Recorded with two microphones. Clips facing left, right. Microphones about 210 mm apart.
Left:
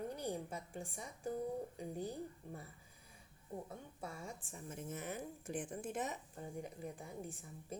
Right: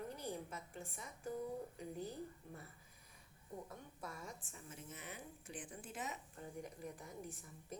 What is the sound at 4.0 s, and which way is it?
Speech, 30° left (ahead or behind).